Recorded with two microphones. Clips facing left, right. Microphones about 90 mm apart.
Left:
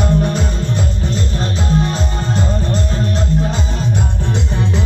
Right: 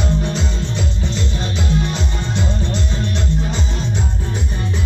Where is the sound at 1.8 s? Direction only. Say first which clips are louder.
Left 4 dB; 40° left (ahead or behind).